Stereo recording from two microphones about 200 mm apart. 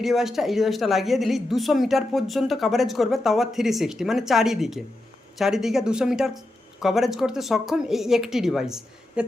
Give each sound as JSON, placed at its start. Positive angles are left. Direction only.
{"t": 0.0, "sound": "a woman's voice", "side_deg": 0}